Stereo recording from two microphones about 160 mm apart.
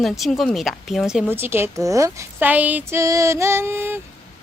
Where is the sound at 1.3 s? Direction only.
15° right (ahead or behind).